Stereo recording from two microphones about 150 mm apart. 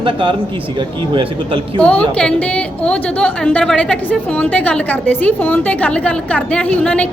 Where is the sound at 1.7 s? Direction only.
10° left (ahead or behind).